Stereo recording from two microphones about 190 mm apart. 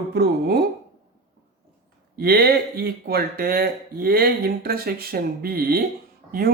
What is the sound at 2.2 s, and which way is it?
Speech, 55° right (ahead or behind).